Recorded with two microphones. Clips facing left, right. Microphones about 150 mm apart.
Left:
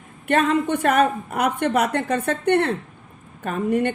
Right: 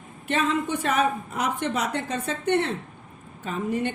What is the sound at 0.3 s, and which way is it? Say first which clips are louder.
Speech: left 5 dB; 60° left (ahead or behind).